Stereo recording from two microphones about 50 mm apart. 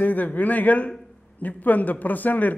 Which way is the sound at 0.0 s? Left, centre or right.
Left.